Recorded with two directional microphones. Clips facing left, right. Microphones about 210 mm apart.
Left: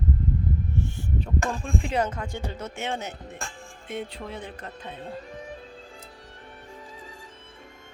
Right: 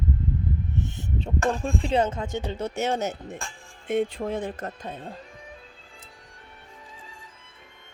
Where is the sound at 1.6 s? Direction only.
25° right (ahead or behind); by 5.0 s 45° right (ahead or behind).